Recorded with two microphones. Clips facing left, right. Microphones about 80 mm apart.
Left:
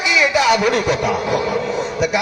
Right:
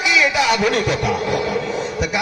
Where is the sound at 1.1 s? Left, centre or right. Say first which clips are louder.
Left 1 dB; left.